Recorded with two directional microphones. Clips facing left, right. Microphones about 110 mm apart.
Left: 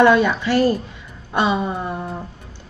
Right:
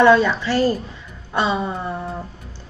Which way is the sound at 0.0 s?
15° left (ahead or behind).